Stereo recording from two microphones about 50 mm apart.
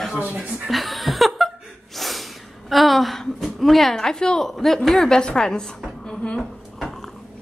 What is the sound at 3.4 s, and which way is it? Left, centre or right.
A woman's voice, centre.